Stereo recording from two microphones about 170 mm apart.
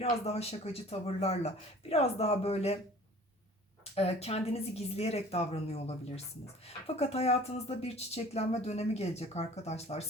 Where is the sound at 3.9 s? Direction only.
35° left (ahead or behind).